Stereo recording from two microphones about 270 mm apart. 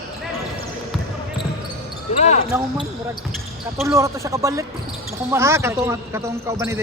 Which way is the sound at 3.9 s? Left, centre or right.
Centre.